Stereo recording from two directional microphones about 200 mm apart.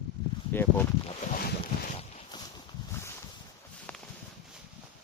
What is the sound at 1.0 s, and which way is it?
Boat, 40° left (ahead or behind).